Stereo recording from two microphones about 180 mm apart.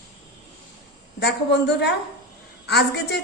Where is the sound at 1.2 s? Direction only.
70° left (ahead or behind).